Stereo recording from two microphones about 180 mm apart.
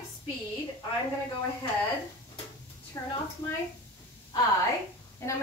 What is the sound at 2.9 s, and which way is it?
Speech, 15° left (ahead or behind).